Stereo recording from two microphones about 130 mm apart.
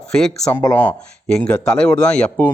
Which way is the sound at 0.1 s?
5° left (ahead or behind).